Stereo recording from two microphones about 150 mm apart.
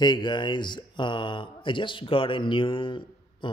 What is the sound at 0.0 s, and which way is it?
Speech, 30° left (ahead or behind).